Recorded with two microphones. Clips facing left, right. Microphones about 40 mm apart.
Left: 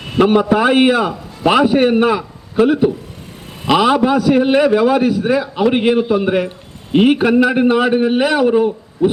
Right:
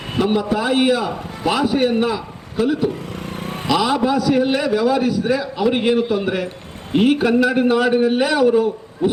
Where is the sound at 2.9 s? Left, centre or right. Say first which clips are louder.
Right 6 dB; right.